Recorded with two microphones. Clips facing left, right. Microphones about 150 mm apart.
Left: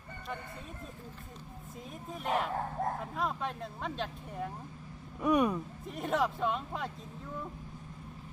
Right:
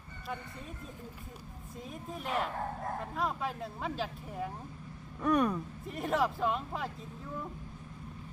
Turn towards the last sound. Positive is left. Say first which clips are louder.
# right 1 dB
turn(degrees=0)  # may be behind; listen again after turning